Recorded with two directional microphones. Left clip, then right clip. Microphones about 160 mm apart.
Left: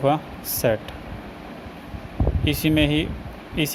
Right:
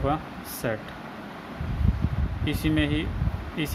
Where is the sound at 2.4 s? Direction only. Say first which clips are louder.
Left 5 dB; 30° left (ahead or behind).